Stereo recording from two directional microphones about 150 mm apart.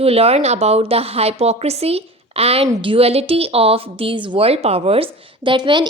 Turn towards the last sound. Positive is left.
turn(degrees=-30)  # may be behind; listen again after turning